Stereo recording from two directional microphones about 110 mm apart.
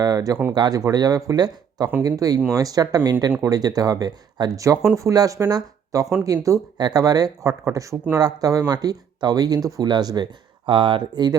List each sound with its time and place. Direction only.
0.0 s speech: 35° right (ahead or behind)
10.7 s speech: 50° right (ahead or behind)